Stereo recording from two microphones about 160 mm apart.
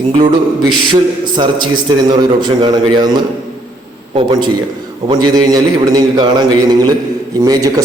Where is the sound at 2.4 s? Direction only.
30° right (ahead or behind).